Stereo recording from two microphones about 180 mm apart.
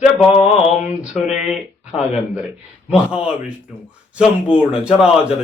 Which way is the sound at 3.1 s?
5° right (ahead or behind).